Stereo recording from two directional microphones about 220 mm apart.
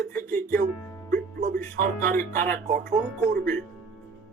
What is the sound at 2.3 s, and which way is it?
Speech, 40° right (ahead or behind).